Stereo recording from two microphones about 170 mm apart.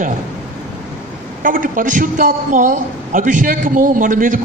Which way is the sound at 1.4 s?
55° right (ahead or behind).